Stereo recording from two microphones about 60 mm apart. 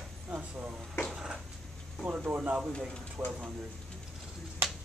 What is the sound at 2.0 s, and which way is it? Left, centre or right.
Speech, right.